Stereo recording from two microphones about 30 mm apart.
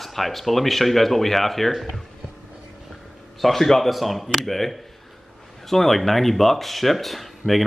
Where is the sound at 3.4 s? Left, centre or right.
Centre.